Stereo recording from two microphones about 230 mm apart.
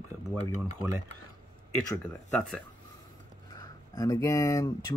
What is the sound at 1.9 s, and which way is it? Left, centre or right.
Speech, centre.